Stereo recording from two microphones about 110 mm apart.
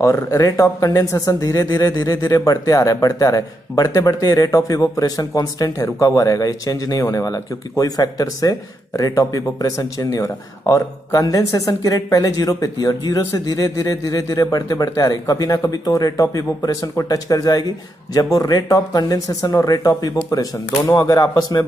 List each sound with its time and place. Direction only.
0.0 s speech: 30° left (ahead or behind)